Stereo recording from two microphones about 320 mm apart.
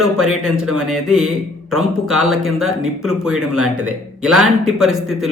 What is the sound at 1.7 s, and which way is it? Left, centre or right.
Speech, centre.